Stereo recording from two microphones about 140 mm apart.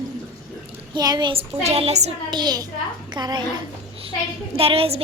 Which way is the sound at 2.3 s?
30° right (ahead or behind).